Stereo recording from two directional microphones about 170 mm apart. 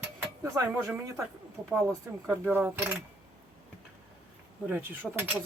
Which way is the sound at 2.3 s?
10° right (ahead or behind).